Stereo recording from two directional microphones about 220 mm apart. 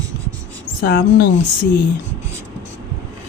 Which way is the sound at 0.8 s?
45° left (ahead or behind).